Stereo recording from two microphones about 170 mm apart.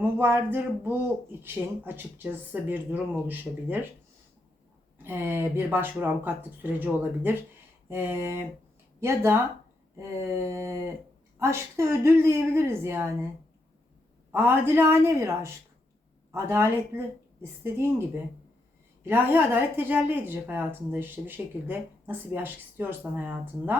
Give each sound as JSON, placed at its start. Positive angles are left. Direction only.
{"t": 0.0, "sound": "speech", "side_deg": -15}
{"t": 5.0, "sound": "speech", "side_deg": -10}
{"t": 14.3, "sound": "speech", "side_deg": -10}
{"t": 19.0, "sound": "speech", "side_deg": -10}